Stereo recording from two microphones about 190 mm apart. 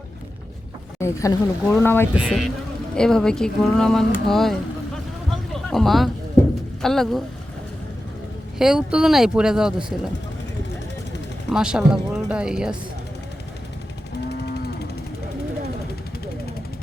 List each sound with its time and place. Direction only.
0.9 s speech: 15° left (ahead or behind)
2.1 s speech: 5° right (ahead or behind)
5.3 s a sound: centre (ahead or behind)
6.8 s speech: centre (ahead or behind)
8.5 s speech: 5° right (ahead or behind)
11.5 s speech: 5° right (ahead or behind)
14.3 s a sound: 60° left (ahead or behind)